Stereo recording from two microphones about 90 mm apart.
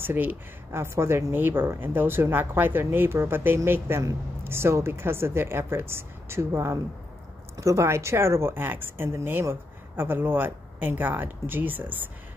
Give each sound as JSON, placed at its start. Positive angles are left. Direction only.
{"t": 0.0, "sound": "speech", "side_deg": -20}